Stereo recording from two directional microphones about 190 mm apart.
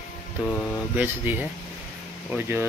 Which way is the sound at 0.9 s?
10° right (ahead or behind).